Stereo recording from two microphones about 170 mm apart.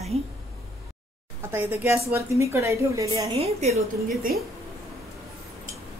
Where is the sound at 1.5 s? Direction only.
10° right (ahead or behind).